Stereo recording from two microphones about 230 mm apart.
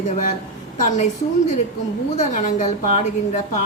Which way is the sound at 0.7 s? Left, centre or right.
Left.